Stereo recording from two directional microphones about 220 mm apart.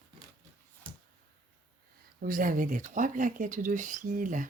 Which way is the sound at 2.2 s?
40° right (ahead or behind).